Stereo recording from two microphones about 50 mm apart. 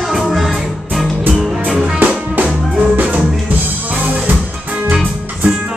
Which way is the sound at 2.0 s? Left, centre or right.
Right.